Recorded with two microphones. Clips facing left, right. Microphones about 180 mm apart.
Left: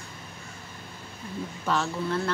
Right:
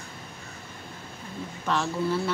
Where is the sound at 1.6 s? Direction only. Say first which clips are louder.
Right 2 dB; centre (ahead or behind).